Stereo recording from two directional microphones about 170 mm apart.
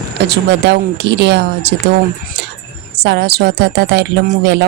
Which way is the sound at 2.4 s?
90° right.